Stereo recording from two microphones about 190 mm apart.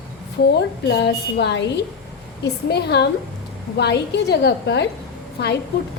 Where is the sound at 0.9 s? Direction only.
60° left (ahead or behind).